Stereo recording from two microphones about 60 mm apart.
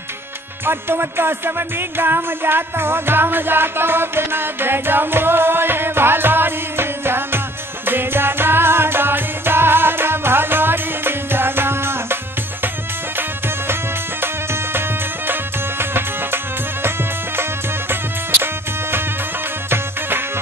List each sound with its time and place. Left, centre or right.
0.7 s music: right
14.2 s music: right
18.4 s music: right